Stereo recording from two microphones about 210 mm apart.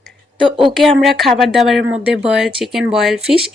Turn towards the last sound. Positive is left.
turn(degrees=0)  # may be behind; listen again after turning